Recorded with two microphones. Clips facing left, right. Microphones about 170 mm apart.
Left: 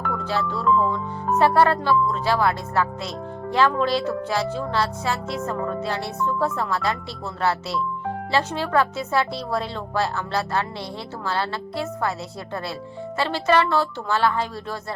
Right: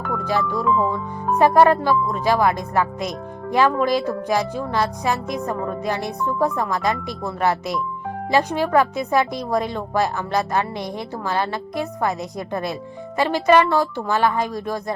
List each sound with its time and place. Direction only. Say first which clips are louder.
0.3 s speech: right 2 dB; 15° right (ahead or behind)
8.3 s speech: right 5 dB; 15° right (ahead or behind)
13.1 s speech: right 4 dB; 15° right (ahead or behind)